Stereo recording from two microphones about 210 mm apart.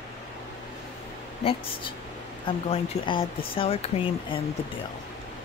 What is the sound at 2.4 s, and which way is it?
Speech, 25° left (ahead or behind).